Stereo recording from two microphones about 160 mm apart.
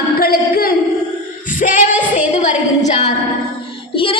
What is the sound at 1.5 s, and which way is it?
Singing, 55° left (ahead or behind).